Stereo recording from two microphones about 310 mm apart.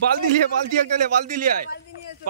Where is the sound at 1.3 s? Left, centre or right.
Right.